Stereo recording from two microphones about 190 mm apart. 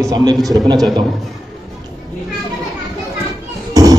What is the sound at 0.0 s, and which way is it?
Speech, 20° right (ahead or behind).